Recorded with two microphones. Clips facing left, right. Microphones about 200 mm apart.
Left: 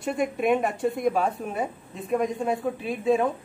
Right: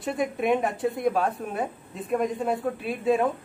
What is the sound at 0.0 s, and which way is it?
A woman's voice, centre (ahead or behind).